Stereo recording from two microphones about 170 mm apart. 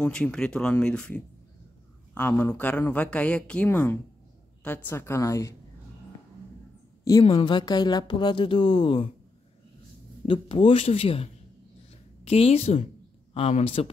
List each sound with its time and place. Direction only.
0.0 s speech: 5° left (ahead or behind)
7.2 s speech: 30° left (ahead or behind)
10.2 s a man's voice: 30° left (ahead or behind)
12.3 s a man's voice: 35° left (ahead or behind)